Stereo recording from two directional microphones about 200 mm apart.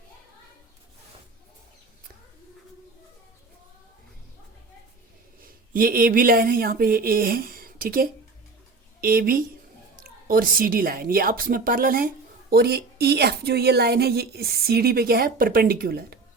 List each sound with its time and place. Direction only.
5.4 s a woman's voice: 45° right (ahead or behind)